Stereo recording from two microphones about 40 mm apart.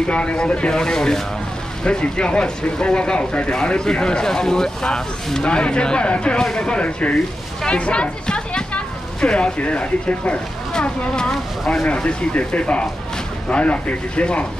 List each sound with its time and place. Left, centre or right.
0.1 s speech: left
10.7 s speech: centre
11.8 s speech: left